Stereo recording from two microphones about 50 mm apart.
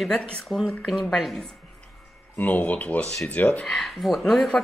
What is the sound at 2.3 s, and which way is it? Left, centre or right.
Speech, left.